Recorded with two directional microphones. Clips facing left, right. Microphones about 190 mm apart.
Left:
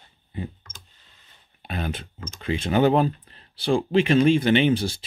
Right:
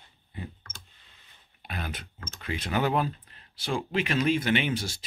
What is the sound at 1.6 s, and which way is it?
Speech, 25° left (ahead or behind).